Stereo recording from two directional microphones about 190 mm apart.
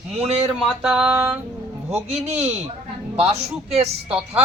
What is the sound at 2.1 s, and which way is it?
Speech, 35° right (ahead or behind).